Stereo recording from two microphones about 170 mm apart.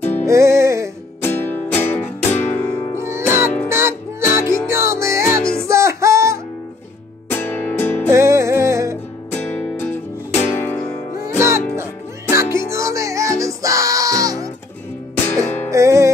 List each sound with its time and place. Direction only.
0.2 s music: 15° right (ahead or behind)
1.2 s music: 10° left (ahead or behind)
3.0 s music: 15° right (ahead or behind)
7.2 s music: 10° left (ahead or behind)
8.1 s music: 15° right (ahead or behind)
9.3 s music: 10° left (ahead or behind)
11.3 s music: 15° right (ahead or behind)
15.7 s music: 15° right (ahead or behind)